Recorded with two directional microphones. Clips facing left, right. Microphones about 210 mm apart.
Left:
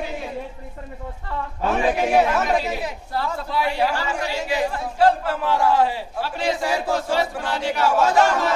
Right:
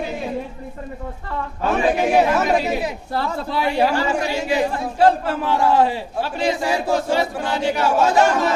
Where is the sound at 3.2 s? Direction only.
25° right (ahead or behind).